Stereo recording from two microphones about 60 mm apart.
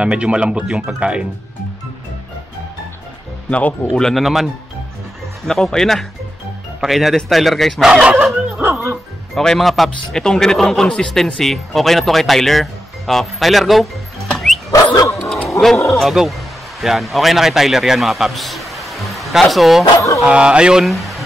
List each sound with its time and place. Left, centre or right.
0.0 s speech: centre
3.4 s speech: left
4.0 s a man's voice: centre
5.5 s a man's voice: centre
7.8 s speech: centre
8.5 s music: right
9.3 s speech: centre
14.3 s music: centre
14.7 s dog: left
15.9 s a man's voice: centre
20.2 s speech: centre
20.8 s speech: centre